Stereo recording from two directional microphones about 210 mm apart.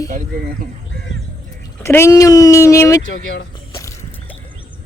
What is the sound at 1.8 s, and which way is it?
Speech, 10° left (ahead or behind).